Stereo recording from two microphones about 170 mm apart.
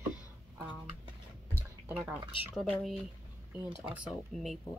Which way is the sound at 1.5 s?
10° right (ahead or behind).